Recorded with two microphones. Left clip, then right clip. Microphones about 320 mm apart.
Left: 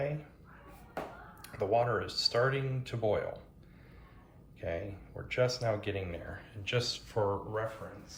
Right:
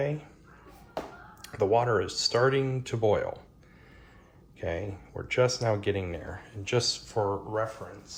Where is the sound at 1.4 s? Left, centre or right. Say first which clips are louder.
Right 5 dB; right.